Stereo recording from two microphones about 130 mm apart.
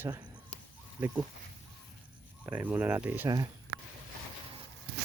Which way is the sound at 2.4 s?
15° right (ahead or behind).